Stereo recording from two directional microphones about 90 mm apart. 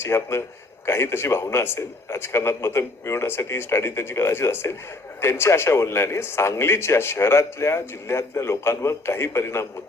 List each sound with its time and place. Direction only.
0.0 s speech: 30° left (ahead or behind)